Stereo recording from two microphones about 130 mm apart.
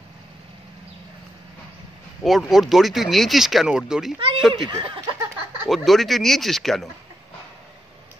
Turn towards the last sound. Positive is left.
turn(degrees=0)  # may be behind; listen again after turning